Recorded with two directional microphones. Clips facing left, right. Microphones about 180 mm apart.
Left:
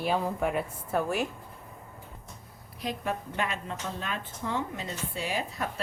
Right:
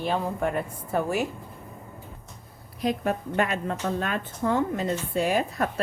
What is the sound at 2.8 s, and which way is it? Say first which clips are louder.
A woman's voice: right 7 dB; 50° right (ahead or behind).